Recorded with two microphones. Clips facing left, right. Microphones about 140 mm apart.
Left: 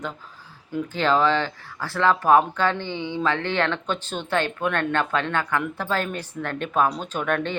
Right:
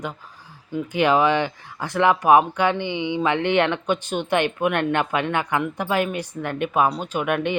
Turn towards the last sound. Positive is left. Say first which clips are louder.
# right 2 dB
turn(degrees=-15)  # may be behind; listen again after turning